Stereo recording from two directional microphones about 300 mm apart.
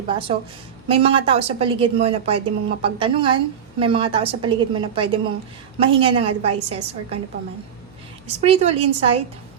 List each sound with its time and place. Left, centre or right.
0.1 s a woman's voice: centre
8.4 s a woman's voice: right